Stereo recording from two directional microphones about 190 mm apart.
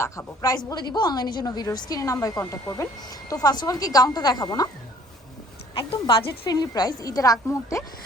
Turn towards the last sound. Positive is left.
turn(degrees=15)  # may be behind; listen again after turning